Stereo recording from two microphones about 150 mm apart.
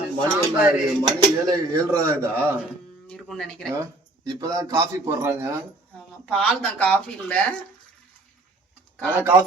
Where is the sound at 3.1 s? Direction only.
5° left (ahead or behind).